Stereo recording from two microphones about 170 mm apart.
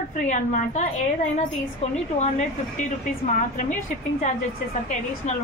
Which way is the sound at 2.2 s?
45° left (ahead or behind).